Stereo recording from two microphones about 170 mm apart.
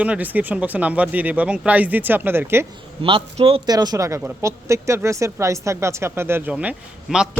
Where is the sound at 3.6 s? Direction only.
25° right (ahead or behind).